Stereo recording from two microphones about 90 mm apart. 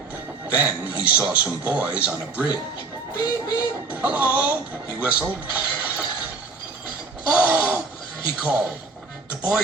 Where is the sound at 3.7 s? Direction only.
15° right (ahead or behind).